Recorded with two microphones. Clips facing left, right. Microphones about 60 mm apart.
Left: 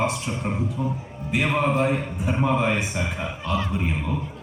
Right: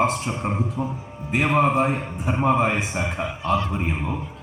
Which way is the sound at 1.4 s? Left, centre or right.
Centre.